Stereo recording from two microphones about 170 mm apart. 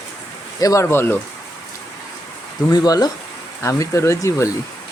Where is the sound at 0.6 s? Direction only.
20° left (ahead or behind).